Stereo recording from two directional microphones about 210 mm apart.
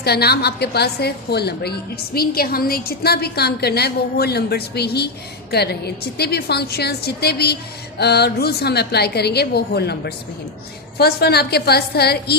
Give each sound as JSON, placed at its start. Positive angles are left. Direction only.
{"t": 0.0, "sound": "a woman's voice", "side_deg": 50}